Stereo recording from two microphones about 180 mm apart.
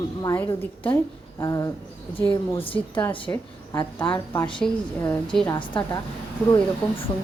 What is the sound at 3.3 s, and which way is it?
A woman's voice, 15° left (ahead or behind).